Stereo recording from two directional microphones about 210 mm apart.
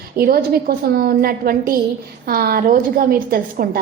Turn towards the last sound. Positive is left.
turn(degrees=-45)  # may be behind; listen again after turning